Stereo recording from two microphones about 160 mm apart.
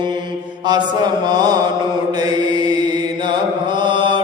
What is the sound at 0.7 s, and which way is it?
Mantra, 25° right (ahead or behind).